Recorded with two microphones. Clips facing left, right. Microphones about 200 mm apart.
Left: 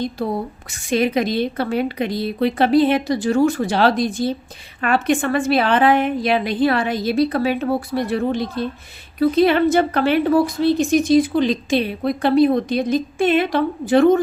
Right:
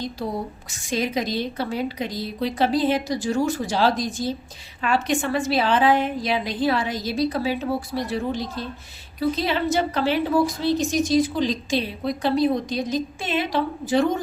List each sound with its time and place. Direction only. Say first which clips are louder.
0.7 s a woman's voice: left 7 dB; 60° left (ahead or behind)